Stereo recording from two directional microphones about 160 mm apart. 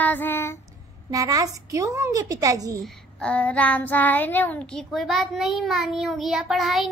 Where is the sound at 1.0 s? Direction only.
20° right (ahead or behind).